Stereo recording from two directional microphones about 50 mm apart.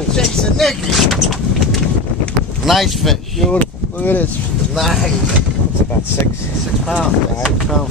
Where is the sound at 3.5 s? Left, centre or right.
Left.